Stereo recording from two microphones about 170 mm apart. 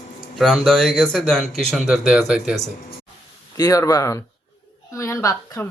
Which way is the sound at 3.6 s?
20° left (ahead or behind).